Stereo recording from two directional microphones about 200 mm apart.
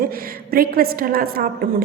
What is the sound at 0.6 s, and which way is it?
A woman's voice, 45° right (ahead or behind).